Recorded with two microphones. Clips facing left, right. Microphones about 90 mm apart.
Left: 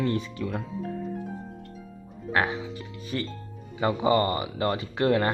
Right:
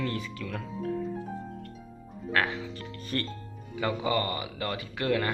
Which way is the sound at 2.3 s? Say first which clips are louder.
Left 3 dB; 20° left (ahead or behind).